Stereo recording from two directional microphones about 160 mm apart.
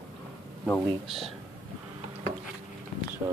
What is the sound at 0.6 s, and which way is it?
Speech, 10° left (ahead or behind).